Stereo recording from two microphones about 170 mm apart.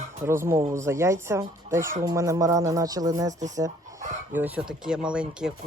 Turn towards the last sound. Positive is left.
turn(degrees=-5)  # may be behind; listen again after turning